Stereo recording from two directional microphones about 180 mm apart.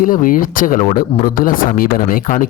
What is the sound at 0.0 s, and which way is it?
Speech, 50° left (ahead or behind).